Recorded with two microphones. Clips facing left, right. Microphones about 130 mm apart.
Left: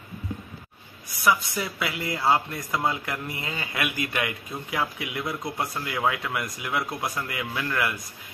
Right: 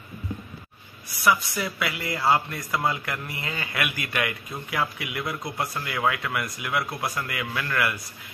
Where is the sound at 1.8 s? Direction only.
25° left (ahead or behind).